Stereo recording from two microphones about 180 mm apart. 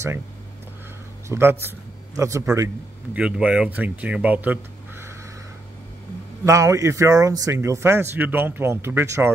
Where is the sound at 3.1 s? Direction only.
5° right (ahead or behind).